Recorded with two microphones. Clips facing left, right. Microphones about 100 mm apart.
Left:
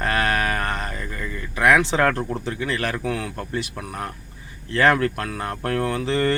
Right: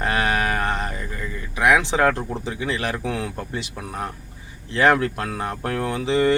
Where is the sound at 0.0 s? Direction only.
15° right (ahead or behind).